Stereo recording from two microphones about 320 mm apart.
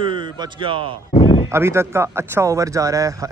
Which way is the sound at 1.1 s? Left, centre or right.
Centre.